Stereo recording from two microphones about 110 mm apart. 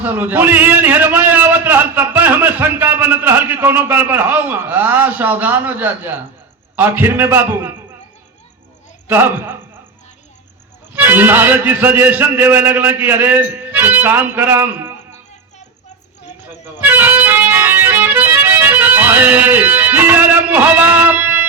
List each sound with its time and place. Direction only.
0.0 s a man's voice: 15° right (ahead or behind)
9.0 s a man's voice: 20° right (ahead or behind)
10.9 s a man's voice: 15° right (ahead or behind)
16.8 s music: 20° right (ahead or behind)